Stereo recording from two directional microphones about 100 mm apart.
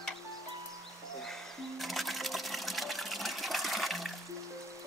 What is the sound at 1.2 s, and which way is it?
Music, centre (ahead or behind).